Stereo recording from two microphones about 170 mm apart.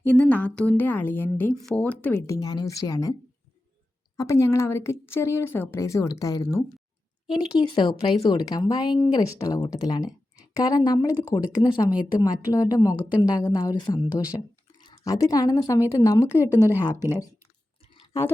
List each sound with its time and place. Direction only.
0.0 s a woman's voice: 10° left (ahead or behind)
4.2 s a woman's voice: 15° left (ahead or behind)
16.5 s speech: 15° right (ahead or behind)
16.7 s a woman's voice: 15° left (ahead or behind)